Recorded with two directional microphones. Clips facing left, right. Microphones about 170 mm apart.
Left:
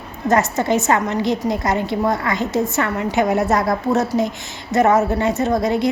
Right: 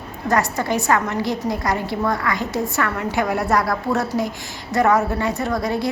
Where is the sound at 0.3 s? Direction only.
25° left (ahead or behind).